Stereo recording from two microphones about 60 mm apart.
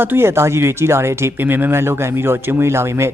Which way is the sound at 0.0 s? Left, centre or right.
Right.